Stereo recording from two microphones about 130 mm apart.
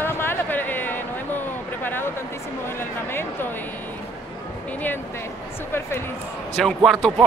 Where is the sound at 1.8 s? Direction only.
15° left (ahead or behind).